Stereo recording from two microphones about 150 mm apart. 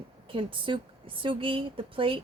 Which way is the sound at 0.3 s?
35° right (ahead or behind).